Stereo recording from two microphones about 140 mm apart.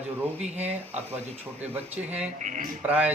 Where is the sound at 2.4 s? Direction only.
65° right (ahead or behind).